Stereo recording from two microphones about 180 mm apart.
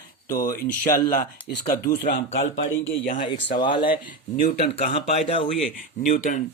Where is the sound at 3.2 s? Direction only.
25° left (ahead or behind).